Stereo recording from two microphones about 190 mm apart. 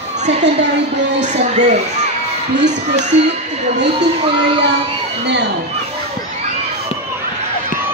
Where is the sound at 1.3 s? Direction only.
35° right (ahead or behind).